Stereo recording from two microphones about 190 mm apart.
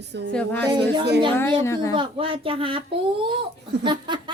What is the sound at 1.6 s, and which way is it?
Speech, 15° left (ahead or behind).